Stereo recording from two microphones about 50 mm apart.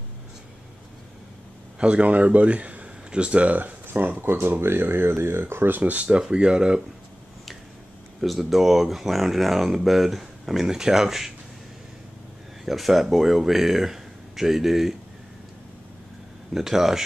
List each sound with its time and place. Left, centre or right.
1.8 s speech: right
5.8 s speech: right
6.0 s speech: centre
8.2 s speech: centre
12.6 s speech: centre
16.5 s speech: centre